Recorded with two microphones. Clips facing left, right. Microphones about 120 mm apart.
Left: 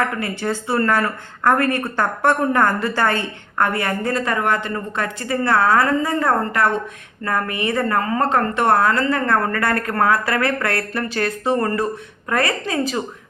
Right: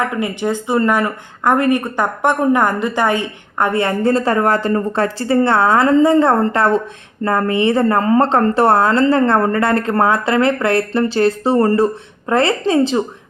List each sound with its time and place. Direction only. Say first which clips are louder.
0.0 s speech: right 3 dB; 20° right (ahead or behind)